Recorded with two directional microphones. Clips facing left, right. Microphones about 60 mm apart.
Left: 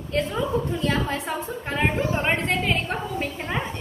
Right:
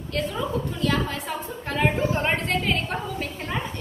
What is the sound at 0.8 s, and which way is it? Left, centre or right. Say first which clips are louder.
A woman's voice: left 1 dB; left.